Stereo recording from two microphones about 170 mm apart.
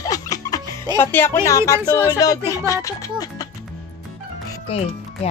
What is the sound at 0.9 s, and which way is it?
Speech, 15° left (ahead or behind).